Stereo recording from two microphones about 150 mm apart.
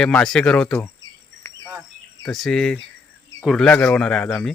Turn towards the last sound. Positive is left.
turn(degrees=5)  # may be behind; listen again after turning